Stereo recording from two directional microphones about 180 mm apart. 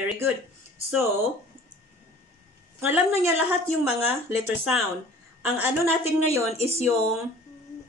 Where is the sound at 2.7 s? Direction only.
15° right (ahead or behind).